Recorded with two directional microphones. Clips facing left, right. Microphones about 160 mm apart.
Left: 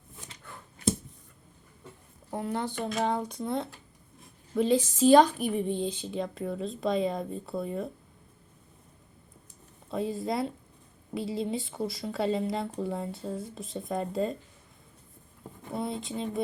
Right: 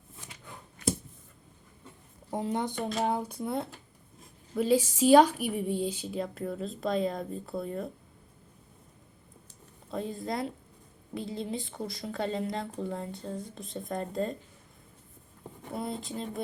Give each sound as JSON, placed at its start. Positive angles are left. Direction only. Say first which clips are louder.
{"t": 2.3, "sound": "speech", "louder": "right 1 dB", "side_deg": -20}
{"t": 9.9, "sound": "speech", "louder": "left 3 dB", "side_deg": 0}
{"t": 15.7, "sound": "speech", "louder": "left 2 dB", "side_deg": 0}